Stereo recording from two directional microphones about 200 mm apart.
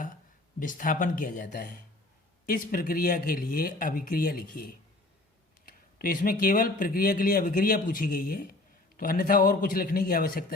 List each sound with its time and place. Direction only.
0.6 s speech: 40° left (ahead or behind)